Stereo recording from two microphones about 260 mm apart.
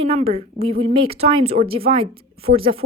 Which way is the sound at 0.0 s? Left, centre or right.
Right.